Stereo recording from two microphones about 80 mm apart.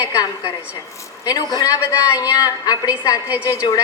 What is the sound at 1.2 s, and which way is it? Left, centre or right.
A woman's voice, left.